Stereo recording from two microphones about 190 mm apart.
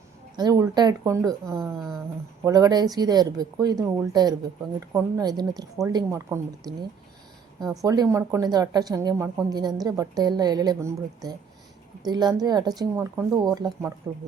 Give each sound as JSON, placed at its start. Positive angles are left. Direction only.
{"t": 0.3, "sound": "speech", "side_deg": -20}
{"t": 7.8, "sound": "speech", "side_deg": -20}